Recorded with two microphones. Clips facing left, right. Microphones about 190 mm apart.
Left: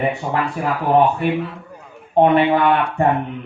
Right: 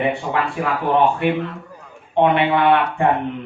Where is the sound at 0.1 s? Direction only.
40° left (ahead or behind).